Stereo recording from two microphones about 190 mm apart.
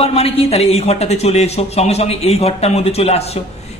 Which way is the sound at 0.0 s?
30° left (ahead or behind).